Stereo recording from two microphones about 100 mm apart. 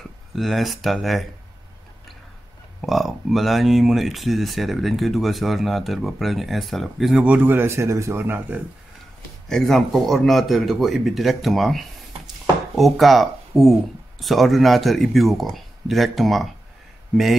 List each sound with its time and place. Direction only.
0.4 s speech: centre (ahead or behind)
2.8 s speech: centre (ahead or behind)
7.2 s speech: 20° right (ahead or behind)
9.5 s speech: 5° left (ahead or behind)